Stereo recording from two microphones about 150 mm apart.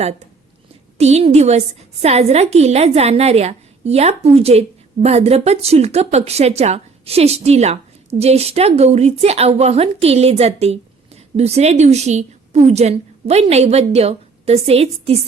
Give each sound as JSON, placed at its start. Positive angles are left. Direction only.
{"t": 0.9, "sound": "a woman's voice", "side_deg": -45}